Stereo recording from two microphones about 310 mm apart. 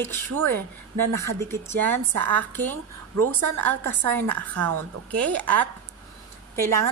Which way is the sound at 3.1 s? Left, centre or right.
Right.